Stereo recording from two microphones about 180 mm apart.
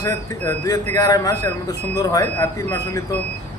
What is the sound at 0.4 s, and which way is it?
Speech, 15° left (ahead or behind).